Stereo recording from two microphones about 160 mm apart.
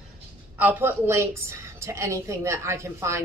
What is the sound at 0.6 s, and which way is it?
A woman's voice, 10° right (ahead or behind).